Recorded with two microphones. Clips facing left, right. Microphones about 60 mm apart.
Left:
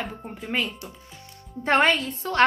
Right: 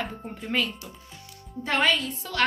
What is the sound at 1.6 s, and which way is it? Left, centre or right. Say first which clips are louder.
Speech: left 4 dB; left.